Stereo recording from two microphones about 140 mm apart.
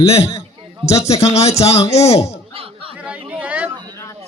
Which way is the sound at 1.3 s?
50° left (ahead or behind).